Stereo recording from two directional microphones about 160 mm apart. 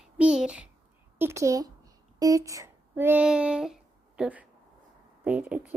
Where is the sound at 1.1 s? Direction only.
15° right (ahead or behind).